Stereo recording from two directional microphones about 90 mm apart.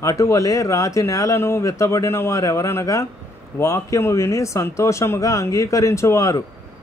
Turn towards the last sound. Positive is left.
turn(degrees=35)  # may be behind; listen again after turning